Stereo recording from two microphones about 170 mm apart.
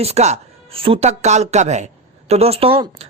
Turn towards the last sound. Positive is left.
turn(degrees=-35)  # may be behind; listen again after turning